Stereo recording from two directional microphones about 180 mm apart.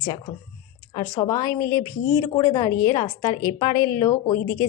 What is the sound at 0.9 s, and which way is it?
A woman's voice, 20° left (ahead or behind).